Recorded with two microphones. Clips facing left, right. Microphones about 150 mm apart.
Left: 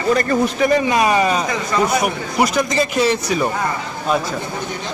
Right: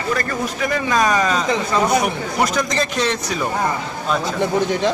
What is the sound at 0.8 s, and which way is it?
A man's voice, 10° left (ahead or behind).